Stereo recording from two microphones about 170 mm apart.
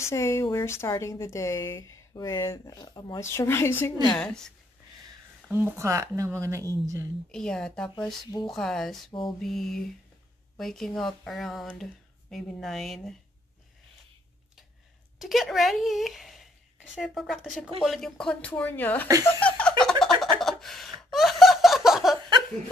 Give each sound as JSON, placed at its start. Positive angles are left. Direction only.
{"t": 0.0, "sound": "speech", "side_deg": 15}
{"t": 5.5, "sound": "speech", "side_deg": -15}
{"t": 7.2, "sound": "speech", "side_deg": 5}
{"t": 15.1, "sound": "speech", "side_deg": 0}
{"t": 19.4, "sound": "chuckle", "side_deg": 5}
{"t": 19.8, "sound": "a sound", "side_deg": 0}